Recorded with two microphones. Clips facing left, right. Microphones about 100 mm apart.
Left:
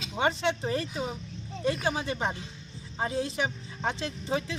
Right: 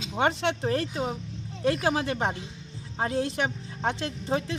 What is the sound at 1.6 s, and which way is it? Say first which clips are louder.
Speech: right 4 dB; 80° right.